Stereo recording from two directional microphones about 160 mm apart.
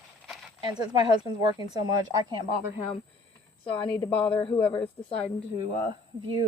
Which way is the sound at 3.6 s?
35° left (ahead or behind).